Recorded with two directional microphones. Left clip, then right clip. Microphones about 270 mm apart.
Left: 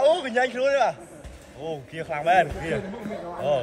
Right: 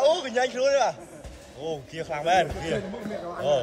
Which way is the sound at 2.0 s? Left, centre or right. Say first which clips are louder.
Left 2 dB; centre.